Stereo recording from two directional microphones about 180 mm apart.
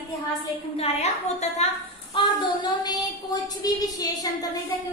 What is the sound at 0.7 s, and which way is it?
Speech, 35° left (ahead or behind).